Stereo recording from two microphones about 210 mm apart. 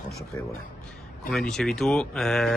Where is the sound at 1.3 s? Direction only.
Centre (ahead or behind).